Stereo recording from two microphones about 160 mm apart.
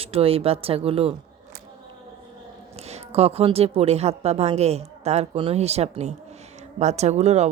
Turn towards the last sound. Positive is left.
turn(degrees=-45)  # may be behind; listen again after turning